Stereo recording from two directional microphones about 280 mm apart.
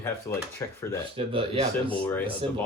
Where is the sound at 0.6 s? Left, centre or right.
Centre.